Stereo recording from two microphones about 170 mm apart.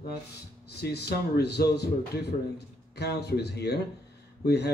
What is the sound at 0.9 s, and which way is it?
Speech, 75° left (ahead or behind).